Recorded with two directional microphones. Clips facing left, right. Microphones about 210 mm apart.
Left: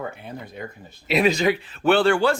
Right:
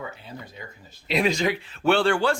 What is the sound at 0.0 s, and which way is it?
Speech, 55° left (ahead or behind).